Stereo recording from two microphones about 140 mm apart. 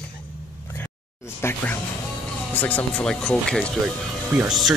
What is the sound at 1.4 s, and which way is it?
Speech, 15° left (ahead or behind).